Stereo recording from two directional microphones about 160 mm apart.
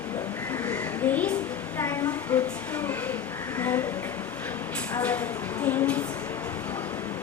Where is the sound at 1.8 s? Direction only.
20° left (ahead or behind).